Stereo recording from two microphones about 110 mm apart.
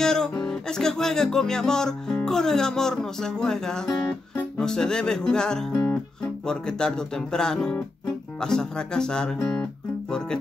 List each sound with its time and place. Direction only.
0.0 s music: 5° left (ahead or behind)
6.4 s speech: 5° left (ahead or behind)